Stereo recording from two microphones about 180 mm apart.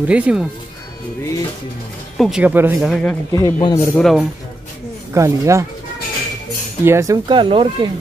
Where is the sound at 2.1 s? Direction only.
Centre (ahead or behind).